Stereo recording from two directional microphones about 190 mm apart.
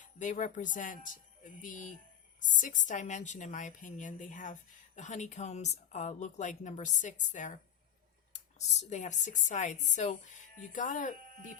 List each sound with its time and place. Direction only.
0.0 s a woman's voice: 40° left (ahead or behind)